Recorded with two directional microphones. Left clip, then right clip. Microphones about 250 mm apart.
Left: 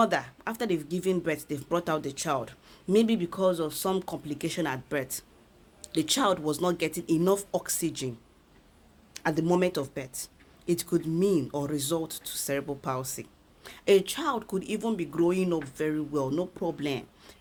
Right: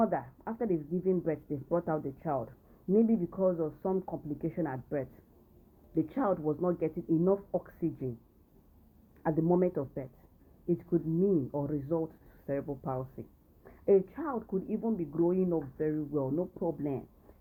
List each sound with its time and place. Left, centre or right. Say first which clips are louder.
0.0 s speech: left 5 dB; left
9.2 s speech: left 3 dB; left